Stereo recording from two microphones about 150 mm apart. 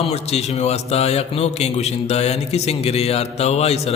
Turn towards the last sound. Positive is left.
turn(degrees=45)  # may be behind; listen again after turning